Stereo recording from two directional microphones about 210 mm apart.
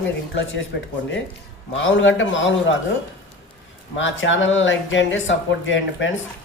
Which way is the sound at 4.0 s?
65° left (ahead or behind).